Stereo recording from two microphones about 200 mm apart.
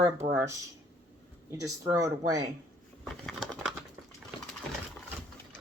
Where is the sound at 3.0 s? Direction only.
5° left (ahead or behind).